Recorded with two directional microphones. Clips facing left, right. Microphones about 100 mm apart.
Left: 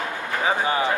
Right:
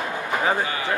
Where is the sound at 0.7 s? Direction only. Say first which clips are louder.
Left 4 dB; 20° left (ahead or behind).